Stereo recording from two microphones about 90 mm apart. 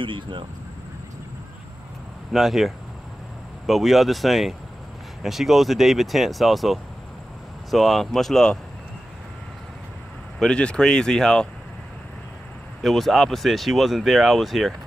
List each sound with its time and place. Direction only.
0.0 s speech: 70° right (ahead or behind)
2.3 s speech: 5° right (ahead or behind)
10.4 s speech: 10° left (ahead or behind)
12.8 s speech: centre (ahead or behind)